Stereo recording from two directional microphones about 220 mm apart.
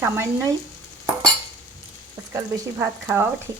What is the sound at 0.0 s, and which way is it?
Frying, 10° right (ahead or behind).